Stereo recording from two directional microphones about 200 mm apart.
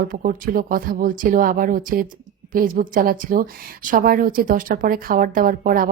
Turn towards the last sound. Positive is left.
turn(degrees=-45)  # may be behind; listen again after turning